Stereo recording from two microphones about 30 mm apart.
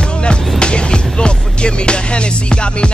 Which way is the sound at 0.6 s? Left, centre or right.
Left.